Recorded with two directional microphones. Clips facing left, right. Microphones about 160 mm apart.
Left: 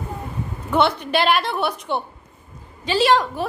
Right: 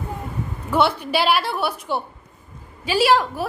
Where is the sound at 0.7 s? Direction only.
5° right (ahead or behind).